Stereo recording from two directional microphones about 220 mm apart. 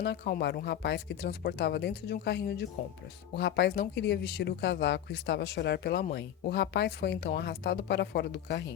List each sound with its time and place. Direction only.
0.0 s speech: 50° left (ahead or behind)